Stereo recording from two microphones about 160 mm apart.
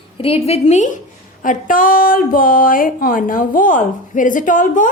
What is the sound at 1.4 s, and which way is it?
Speech, 55° left (ahead or behind).